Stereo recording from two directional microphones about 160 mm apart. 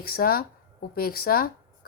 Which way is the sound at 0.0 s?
70° left (ahead or behind).